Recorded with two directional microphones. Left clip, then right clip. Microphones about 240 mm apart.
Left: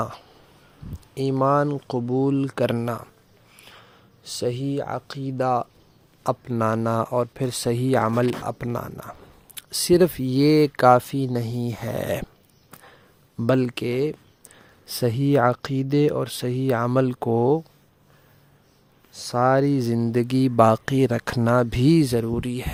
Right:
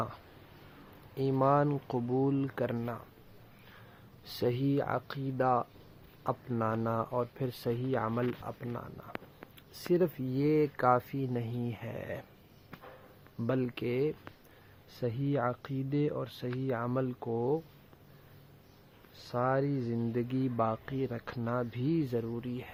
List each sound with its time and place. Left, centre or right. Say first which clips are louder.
1.1 s speech: left 7 dB; left
4.2 s speech: left 6 dB; left
13.4 s speech: left 11 dB; left
14.9 s speech: left 13 dB; left
19.3 s speech: left 12 dB; left